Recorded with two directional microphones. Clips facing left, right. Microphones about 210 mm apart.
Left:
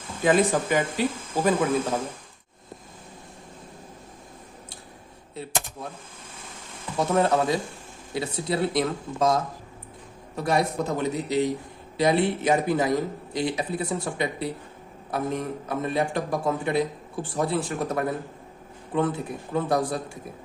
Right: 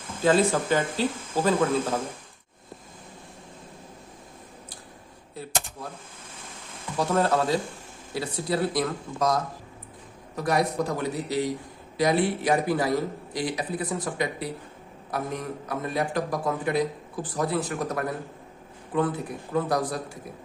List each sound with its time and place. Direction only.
0.2 s speech: 15° left (ahead or behind)
7.0 s speech: 20° left (ahead or behind)